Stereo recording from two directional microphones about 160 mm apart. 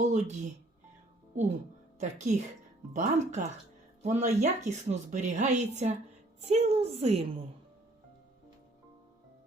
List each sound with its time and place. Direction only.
0.0 s a woman's voice: 50° right (ahead or behind)
2.0 s a woman's voice: 45° right (ahead or behind)